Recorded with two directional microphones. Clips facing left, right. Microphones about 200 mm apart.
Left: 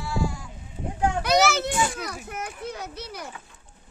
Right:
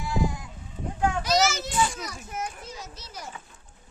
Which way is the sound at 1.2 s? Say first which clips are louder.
Left 3 dB; 60° left (ahead or behind).